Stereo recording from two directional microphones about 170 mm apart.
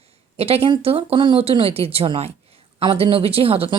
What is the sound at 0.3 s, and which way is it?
A woman's voice, 35° right (ahead or behind).